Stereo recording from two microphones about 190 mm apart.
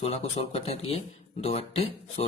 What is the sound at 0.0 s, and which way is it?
Speech, 35° left (ahead or behind).